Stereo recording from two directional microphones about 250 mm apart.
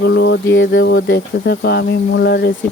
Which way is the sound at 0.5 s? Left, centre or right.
Left.